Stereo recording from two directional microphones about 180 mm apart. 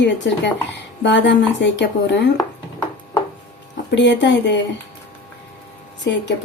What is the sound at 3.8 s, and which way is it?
Speech, 80° left.